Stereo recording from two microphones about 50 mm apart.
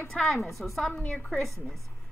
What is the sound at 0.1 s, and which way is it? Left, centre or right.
Speech, centre.